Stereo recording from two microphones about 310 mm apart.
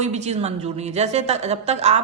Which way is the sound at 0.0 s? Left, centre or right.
Right.